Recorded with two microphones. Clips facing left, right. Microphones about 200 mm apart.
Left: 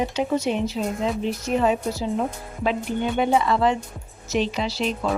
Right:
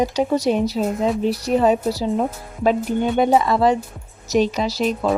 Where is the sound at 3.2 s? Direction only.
40° right (ahead or behind).